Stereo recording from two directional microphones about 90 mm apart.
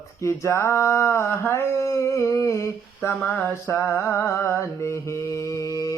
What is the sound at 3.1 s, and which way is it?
Speech, 5° left (ahead or behind).